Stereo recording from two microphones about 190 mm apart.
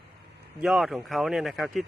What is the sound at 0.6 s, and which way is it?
A man's voice, centre (ahead or behind).